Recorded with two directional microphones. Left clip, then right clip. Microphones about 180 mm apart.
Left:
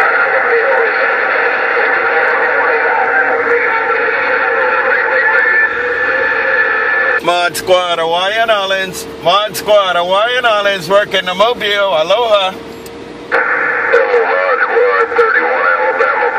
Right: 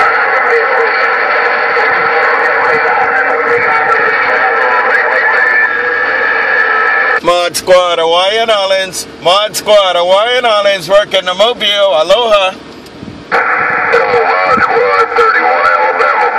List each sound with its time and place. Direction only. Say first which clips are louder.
0.0 s radio: right 2 dB; 45° right (ahead or behind)
7.2 s speech: right 3 dB; 35° right (ahead or behind)
13.3 s radio: right 2 dB; 40° right (ahead or behind)